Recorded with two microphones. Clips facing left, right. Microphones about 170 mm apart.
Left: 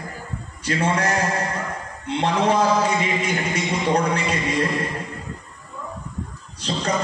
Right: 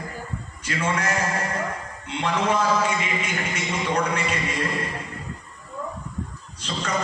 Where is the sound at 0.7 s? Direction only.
35° left (ahead or behind).